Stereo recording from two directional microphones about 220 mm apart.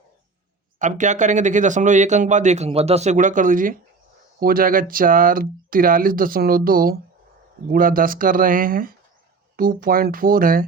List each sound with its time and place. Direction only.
0.8 s speech: 35° right (ahead or behind)